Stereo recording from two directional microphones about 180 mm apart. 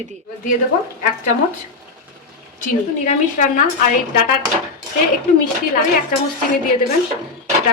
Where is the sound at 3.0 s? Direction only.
40° left (ahead or behind).